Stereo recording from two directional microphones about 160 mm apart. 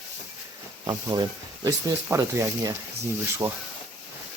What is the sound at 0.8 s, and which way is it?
Speech, 25° right (ahead or behind).